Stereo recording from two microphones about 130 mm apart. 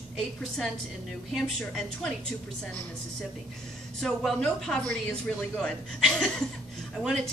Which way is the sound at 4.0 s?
5° left (ahead or behind).